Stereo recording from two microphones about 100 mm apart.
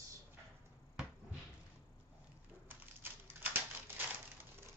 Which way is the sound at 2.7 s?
20° right (ahead or behind).